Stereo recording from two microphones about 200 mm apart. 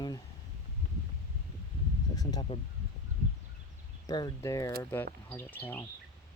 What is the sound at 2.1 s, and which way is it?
Speech, 20° left (ahead or behind).